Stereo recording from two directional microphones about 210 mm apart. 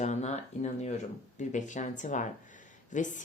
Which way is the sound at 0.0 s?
35° left (ahead or behind).